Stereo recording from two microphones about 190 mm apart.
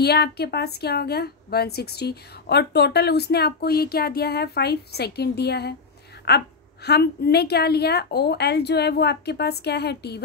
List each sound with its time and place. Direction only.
0.0 s a woman's voice: 55° left (ahead or behind)